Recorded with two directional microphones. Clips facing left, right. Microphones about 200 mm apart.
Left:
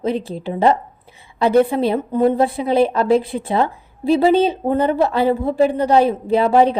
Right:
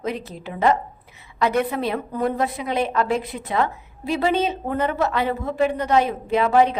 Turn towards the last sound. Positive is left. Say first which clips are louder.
# left 4 dB
turn(degrees=35)  # may be behind; listen again after turning